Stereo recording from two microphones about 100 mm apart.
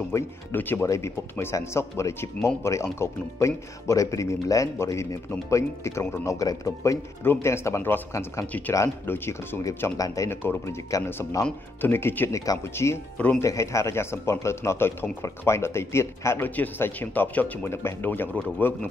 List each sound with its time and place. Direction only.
0.1 s speech: 20° left (ahead or behind)
9.9 s speech: 35° left (ahead or behind)
12.3 s speech: 35° left (ahead or behind)
16.4 s speech: 15° left (ahead or behind)